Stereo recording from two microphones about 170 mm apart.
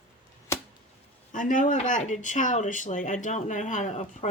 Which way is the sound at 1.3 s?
50° left (ahead or behind).